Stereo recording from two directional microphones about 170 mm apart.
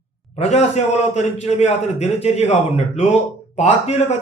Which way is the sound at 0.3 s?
40° left (ahead or behind).